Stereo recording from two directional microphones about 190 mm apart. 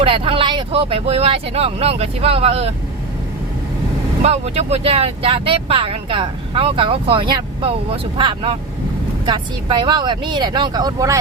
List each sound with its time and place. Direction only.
0.0 s speech: 30° right (ahead or behind)
4.2 s speech: 35° right (ahead or behind); by 11.2 s 20° right (ahead or behind)